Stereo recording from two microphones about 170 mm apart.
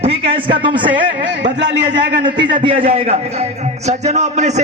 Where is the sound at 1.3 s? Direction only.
90° right.